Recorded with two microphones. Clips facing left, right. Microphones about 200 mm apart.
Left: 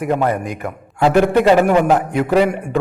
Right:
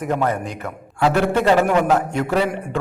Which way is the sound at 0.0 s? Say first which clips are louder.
Left 3 dB; 10° left (ahead or behind).